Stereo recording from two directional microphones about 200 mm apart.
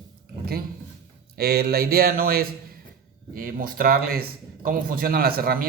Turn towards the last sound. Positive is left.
turn(degrees=-50)  # may be behind; listen again after turning